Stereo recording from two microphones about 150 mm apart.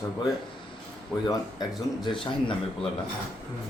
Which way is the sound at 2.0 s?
35° left (ahead or behind).